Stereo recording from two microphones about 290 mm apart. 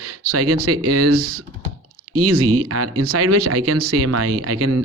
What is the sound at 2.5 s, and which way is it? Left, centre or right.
Speech, right.